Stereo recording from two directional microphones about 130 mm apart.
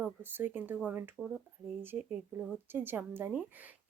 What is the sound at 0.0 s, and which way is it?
Speech, 15° right (ahead or behind).